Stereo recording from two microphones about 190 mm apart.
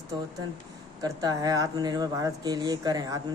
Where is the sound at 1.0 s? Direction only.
20° right (ahead or behind).